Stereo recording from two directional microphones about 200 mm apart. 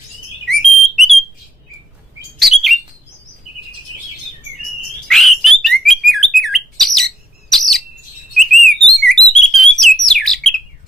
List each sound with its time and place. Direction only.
0.5 s bird: centre (ahead or behind)
5.0 s bird: centre (ahead or behind)